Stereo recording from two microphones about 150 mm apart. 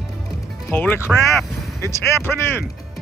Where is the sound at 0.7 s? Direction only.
10° left (ahead or behind).